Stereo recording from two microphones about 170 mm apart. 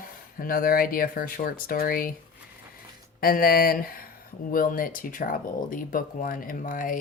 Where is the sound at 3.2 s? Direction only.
60° left (ahead or behind).